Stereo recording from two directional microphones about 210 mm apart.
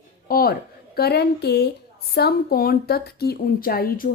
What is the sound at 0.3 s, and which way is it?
A woman's voice, 45° left (ahead or behind).